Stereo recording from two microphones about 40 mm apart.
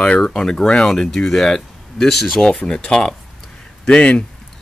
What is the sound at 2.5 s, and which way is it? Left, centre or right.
Speech, left.